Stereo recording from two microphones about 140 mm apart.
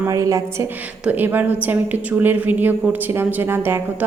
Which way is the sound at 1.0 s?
10° right (ahead or behind).